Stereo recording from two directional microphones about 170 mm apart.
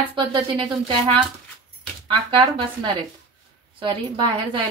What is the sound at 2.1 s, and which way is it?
A woman's voice, 30° right (ahead or behind).